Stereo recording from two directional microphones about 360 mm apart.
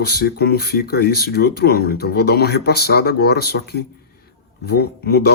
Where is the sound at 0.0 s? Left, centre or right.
Left.